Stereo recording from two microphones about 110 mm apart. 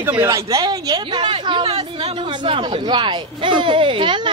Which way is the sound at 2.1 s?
45° right (ahead or behind).